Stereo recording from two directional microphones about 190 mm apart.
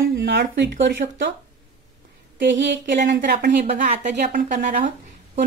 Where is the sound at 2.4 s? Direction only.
75° right (ahead or behind).